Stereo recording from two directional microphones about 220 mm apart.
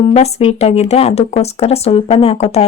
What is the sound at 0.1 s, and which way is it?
Speech, 30° left (ahead or behind).